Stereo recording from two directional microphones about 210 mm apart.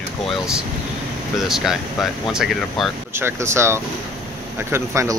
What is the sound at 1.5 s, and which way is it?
Speech, centre (ahead or behind).